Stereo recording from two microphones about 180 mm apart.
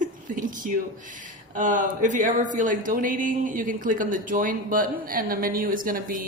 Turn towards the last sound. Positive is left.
turn(degrees=-50)  # may be behind; listen again after turning